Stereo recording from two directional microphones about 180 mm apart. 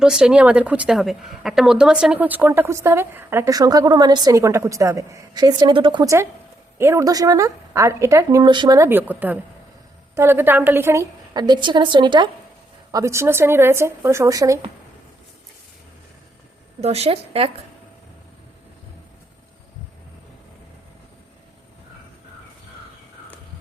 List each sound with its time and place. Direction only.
0.0 s a woman's voice: 5° right (ahead or behind); by 14.6 s 20° right (ahead or behind)
16.8 s a woman's voice: 35° right (ahead or behind)